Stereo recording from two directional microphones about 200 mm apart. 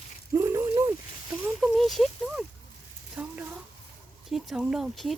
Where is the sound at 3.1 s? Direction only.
5° right (ahead or behind).